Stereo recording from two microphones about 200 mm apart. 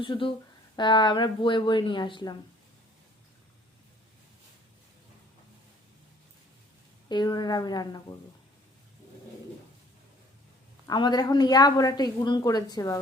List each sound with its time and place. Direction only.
0.0 s a woman's voice: 25° left (ahead or behind)
7.1 s a woman's voice: 20° left (ahead or behind)
10.8 s a woman's voice: 20° left (ahead or behind)